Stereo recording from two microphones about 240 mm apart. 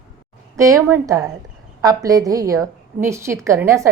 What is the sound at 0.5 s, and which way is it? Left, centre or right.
A woman's voice, centre.